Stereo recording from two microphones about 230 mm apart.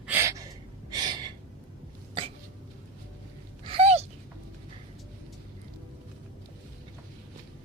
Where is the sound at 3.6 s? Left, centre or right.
Right.